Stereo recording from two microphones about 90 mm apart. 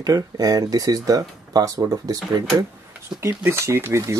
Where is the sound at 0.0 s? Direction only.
45° right (ahead or behind).